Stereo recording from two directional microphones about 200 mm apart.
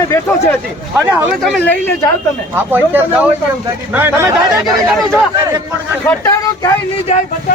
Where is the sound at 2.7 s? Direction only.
10° right (ahead or behind).